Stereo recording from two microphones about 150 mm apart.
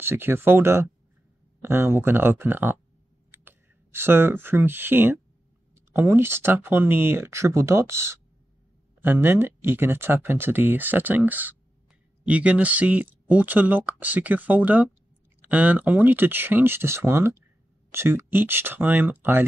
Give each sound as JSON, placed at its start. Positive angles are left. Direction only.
{"t": 0.0, "sound": "speech", "side_deg": -15}